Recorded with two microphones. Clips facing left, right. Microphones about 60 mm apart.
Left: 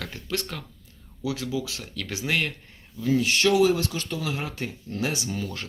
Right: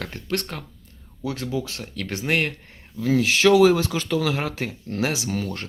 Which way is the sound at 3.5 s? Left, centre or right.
Right.